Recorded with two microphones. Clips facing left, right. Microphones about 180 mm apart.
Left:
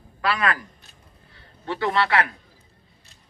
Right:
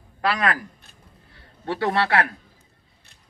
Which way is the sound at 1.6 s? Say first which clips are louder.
Right 1 dB; 45° right (ahead or behind).